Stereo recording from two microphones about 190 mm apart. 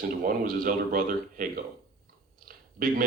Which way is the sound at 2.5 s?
45° right (ahead or behind).